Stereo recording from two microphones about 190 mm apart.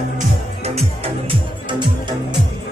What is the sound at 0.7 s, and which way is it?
Music, 30° right (ahead or behind).